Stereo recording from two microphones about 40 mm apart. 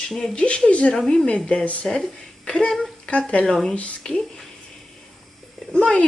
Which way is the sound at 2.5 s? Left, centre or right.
Left.